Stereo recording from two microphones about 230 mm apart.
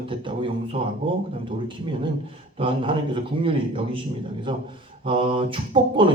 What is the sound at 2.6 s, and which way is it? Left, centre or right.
Speech, right.